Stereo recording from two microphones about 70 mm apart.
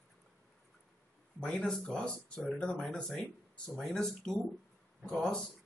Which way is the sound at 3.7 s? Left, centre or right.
Centre.